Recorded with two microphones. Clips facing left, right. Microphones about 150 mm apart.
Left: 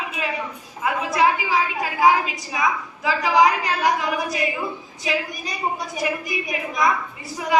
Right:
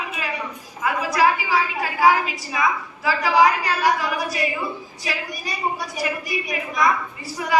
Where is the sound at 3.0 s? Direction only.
20° left (ahead or behind).